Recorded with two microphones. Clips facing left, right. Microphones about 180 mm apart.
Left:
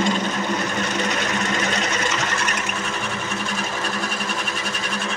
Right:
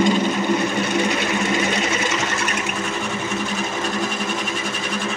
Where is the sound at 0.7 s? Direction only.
10° right (ahead or behind).